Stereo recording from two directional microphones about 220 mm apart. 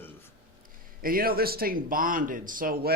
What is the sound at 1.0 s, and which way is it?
Speech, 40° right (ahead or behind).